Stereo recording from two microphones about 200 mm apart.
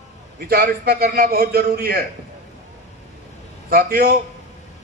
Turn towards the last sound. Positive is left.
turn(degrees=-50)  # may be behind; listen again after turning